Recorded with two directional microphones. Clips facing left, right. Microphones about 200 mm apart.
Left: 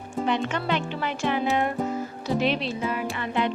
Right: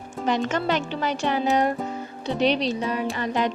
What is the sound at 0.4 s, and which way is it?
Speech, 40° right (ahead or behind).